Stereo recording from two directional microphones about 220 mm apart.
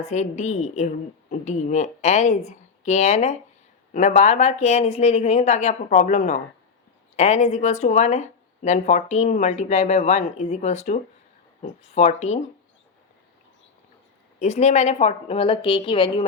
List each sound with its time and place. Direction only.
0.0 s speech: 30° left (ahead or behind)
14.3 s a woman's voice: 30° left (ahead or behind)